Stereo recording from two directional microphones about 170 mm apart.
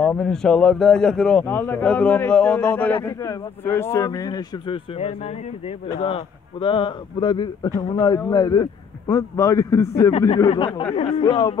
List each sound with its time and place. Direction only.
0.0 s a man's voice: 5° left (ahead or behind)
3.0 s a man's voice: 20° left (ahead or behind)
5.9 s a man's voice: 30° left (ahead or behind)
10.3 s a man's voice: 35° left (ahead or behind)